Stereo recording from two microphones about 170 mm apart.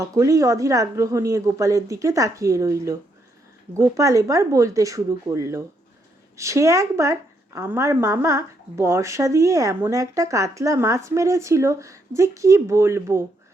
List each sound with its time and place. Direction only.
0.0 s a woman's voice: 20° right (ahead or behind)